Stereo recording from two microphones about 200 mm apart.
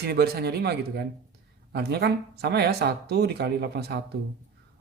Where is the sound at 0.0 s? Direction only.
50° right (ahead or behind).